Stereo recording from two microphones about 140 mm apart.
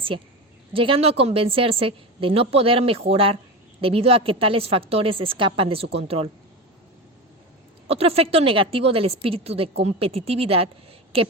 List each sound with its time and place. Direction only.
0.7 s a woman's voice: 40° right (ahead or behind)
7.9 s a woman's voice: 45° right (ahead or behind)